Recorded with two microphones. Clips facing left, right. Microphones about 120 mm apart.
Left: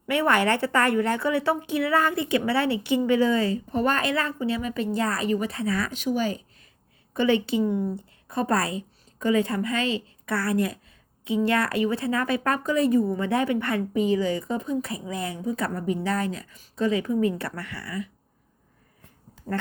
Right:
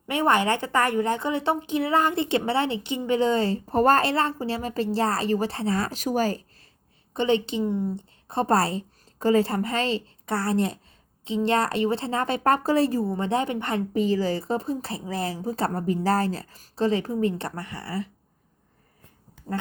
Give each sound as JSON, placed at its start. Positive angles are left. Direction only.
{"t": 0.1, "sound": "a woman's voice", "side_deg": -20}
{"t": 7.1, "sound": "a woman's voice", "side_deg": -25}